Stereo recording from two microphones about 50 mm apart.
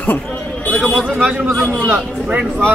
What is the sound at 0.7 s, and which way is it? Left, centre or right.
Speech, left.